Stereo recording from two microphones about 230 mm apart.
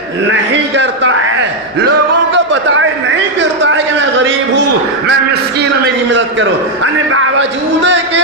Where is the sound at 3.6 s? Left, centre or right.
Right.